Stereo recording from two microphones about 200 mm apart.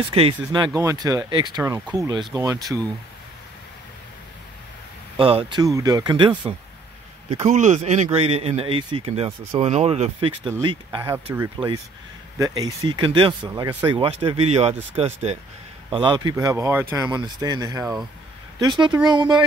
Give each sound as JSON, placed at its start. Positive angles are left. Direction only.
{"t": 0.1, "sound": "speech", "side_deg": -30}
{"t": 5.1, "sound": "speech", "side_deg": -25}
{"t": 7.2, "sound": "speech", "side_deg": -35}
{"t": 15.9, "sound": "speech", "side_deg": -25}